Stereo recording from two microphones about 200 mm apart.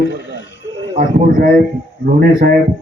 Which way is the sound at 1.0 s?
45° right (ahead or behind).